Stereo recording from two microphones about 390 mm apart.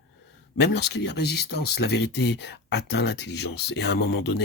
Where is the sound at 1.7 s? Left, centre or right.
Left.